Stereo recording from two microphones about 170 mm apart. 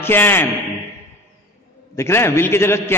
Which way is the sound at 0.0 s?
15° left (ahead or behind).